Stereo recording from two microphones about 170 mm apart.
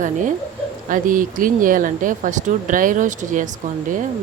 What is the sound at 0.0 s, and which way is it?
Speech, 50° right (ahead or behind).